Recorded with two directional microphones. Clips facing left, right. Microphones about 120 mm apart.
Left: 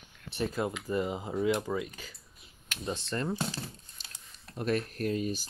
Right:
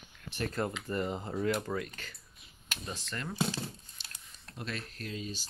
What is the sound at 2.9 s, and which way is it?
Speech, 30° left (ahead or behind).